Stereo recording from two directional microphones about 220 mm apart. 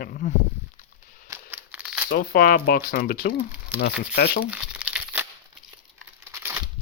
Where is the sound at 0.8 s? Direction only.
35° left (ahead or behind).